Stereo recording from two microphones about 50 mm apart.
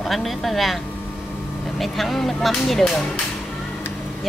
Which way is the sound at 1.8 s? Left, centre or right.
Centre.